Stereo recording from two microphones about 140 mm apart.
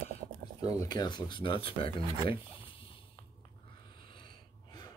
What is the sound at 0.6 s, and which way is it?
Speech, 25° left (ahead or behind).